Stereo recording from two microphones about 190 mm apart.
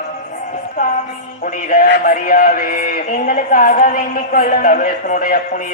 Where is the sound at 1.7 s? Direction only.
50° left (ahead or behind).